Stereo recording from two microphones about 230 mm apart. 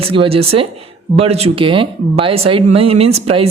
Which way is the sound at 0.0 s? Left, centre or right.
Right.